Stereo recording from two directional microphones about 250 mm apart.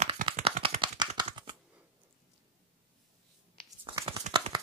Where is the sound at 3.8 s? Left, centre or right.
Right.